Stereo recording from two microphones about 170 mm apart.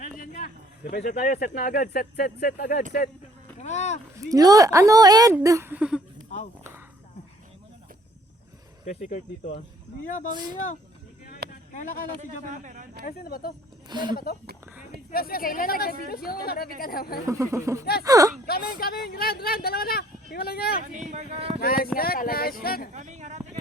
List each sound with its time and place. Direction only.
0.0 s a man's voice: 55° left (ahead or behind)
3.6 s speech: 40° left (ahead or behind)
4.1 s speech: 20° right (ahead or behind)
9.0 s speech: 45° left (ahead or behind)
10.3 s speech: 25° right (ahead or behind)
11.7 s speech: 45° left (ahead or behind)
12.2 s a man's voice: 45° right (ahead or behind)
13.1 s speech: 60° left (ahead or behind)
17.2 s speech: 20° right (ahead or behind)
18.4 s speech: 65° left (ahead or behind)
21.1 s speech: 40° right (ahead or behind)
21.6 s speech: 60° left (ahead or behind)
23.0 s speech: 45° right (ahead or behind)